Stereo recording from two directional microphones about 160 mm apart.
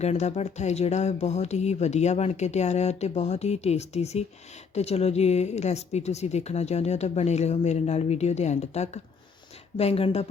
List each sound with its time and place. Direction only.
0.0 s speech: 45° left (ahead or behind)